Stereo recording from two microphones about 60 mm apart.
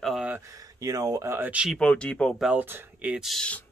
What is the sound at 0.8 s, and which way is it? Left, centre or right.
Speech, right.